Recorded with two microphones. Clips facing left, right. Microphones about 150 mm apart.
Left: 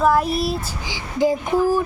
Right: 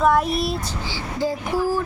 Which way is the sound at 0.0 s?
Centre (ahead or behind).